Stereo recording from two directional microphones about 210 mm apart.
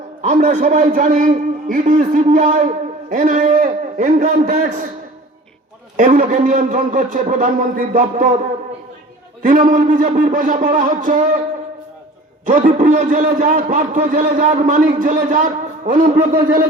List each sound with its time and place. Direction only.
0.2 s a man's voice: 35° right (ahead or behind)
6.0 s a man's voice: 40° right (ahead or behind)
9.4 s a man's voice: 35° right (ahead or behind)
12.5 s a man's voice: 35° right (ahead or behind)